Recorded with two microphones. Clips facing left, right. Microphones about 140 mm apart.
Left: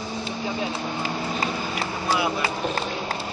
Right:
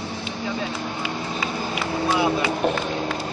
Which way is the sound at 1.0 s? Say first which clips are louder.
Left 2 dB; 40° left (ahead or behind).